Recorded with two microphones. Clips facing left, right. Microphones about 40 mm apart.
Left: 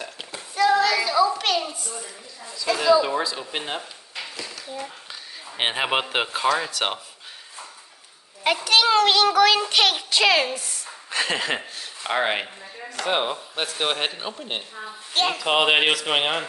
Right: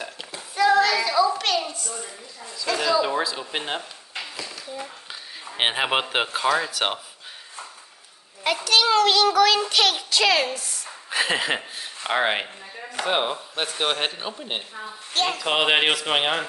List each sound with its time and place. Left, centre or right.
0.6 s a sound: centre
2.5 s speech: centre
4.2 s a sound: centre
5.6 s speech: centre
8.6 s a child's voice: left
11.1 s speech: centre